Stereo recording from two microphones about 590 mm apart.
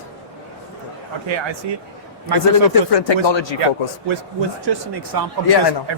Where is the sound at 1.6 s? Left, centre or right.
Right.